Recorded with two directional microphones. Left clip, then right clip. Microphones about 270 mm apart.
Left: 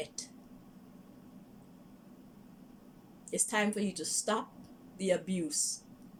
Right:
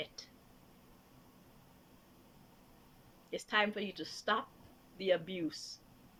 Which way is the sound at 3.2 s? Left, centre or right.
Centre.